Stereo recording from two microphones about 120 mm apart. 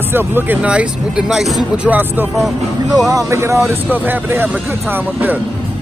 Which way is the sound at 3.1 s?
25° right (ahead or behind).